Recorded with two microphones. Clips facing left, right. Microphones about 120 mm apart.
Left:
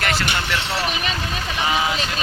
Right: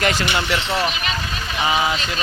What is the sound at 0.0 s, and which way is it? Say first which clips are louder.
Speech: right 3 dB; 20° right (ahead or behind).